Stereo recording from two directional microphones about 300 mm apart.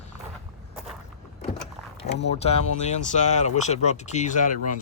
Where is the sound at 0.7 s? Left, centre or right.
Centre.